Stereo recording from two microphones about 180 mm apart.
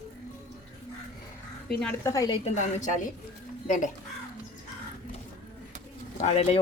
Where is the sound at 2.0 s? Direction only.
20° left (ahead or behind).